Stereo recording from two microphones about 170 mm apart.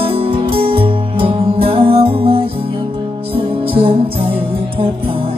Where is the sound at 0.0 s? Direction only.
35° right (ahead or behind).